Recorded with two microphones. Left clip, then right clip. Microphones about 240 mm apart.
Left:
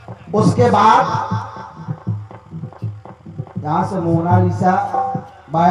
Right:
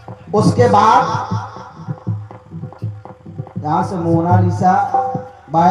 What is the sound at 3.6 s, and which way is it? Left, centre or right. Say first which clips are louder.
A man's voice: right 1 dB; right.